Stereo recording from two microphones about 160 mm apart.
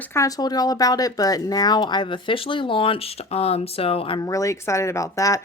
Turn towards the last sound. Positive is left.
turn(degrees=20)  # may be behind; listen again after turning